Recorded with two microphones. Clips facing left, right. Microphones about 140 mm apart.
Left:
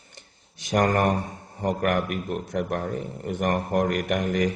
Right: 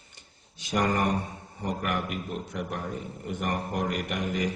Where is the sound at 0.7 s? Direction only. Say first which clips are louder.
Left 4 dB; 50° left (ahead or behind).